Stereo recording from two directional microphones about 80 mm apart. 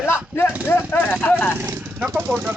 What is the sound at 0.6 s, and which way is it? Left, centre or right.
Speech, left.